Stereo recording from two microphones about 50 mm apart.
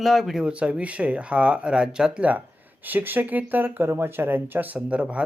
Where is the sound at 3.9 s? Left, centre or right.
Right.